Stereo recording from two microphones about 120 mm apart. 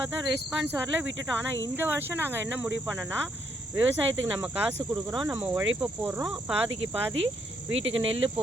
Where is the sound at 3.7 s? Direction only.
15° right (ahead or behind).